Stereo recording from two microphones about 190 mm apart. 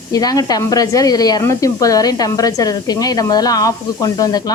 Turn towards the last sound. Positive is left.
turn(degrees=20)  # may be behind; listen again after turning